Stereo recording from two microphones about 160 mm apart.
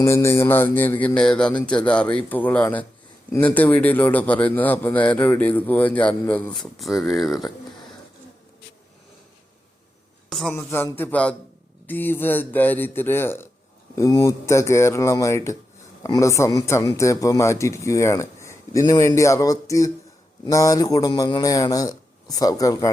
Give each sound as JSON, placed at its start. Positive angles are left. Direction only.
{"t": 0.0, "sound": "a man's voice", "side_deg": 15}
{"t": 10.2, "sound": "a woman's voice", "side_deg": 5}
{"t": 10.5, "sound": "a man's voice", "side_deg": 15}